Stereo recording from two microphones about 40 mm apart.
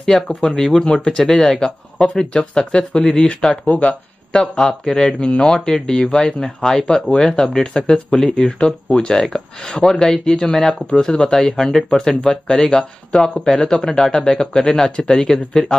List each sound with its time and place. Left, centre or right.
0.4 s speech: centre
3.6 s speech: left
4.3 s speech: centre
8.5 s speech: left